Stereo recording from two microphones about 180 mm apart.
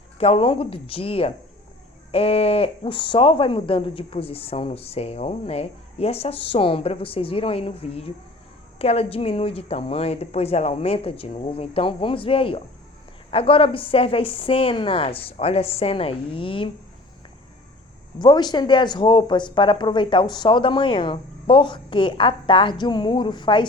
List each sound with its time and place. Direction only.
0.2 s speech: 30° left (ahead or behind)
18.2 s speech: 25° left (ahead or behind)